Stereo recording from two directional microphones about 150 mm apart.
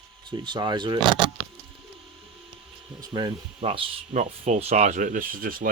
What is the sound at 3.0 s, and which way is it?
Speech, 30° right (ahead or behind).